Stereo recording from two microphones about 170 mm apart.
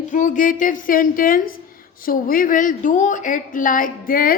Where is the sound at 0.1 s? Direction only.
50° left (ahead or behind).